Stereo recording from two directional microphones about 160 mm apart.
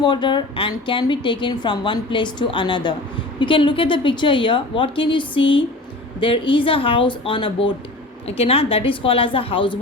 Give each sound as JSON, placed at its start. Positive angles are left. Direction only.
{"t": 0.0, "sound": "a woman's voice", "side_deg": 30}